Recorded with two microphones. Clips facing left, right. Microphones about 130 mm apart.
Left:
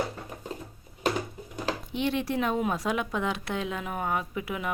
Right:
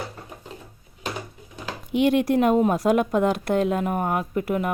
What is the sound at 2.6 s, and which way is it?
Speech, 40° right (ahead or behind).